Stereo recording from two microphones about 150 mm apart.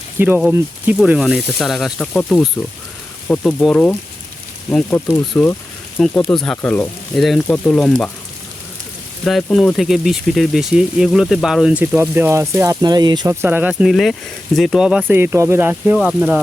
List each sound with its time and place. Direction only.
0.2 s speech: 15° right (ahead or behind); by 8.1 s 5° left (ahead or behind)
9.2 s speech: 5° left (ahead or behind); by 13.3 s 30° right (ahead or behind)
13.4 s speech: 10° right (ahead or behind)
13.9 s speech: centre (ahead or behind)